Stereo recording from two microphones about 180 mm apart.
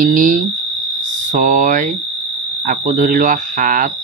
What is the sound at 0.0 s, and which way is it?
Speech, 45° right (ahead or behind).